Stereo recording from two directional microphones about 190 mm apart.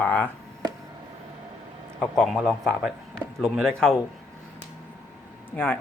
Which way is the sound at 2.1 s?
Centre (ahead or behind).